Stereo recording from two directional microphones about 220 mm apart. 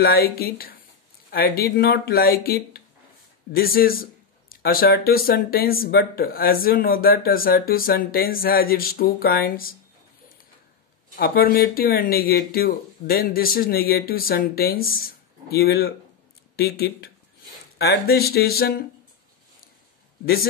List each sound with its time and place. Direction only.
0.0 s speech: 45° left (ahead or behind)
11.1 s speech: 40° left (ahead or behind)